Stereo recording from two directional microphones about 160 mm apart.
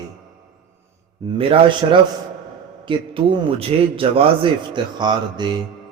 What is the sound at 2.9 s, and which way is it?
A man's voice, 35° right (ahead or behind).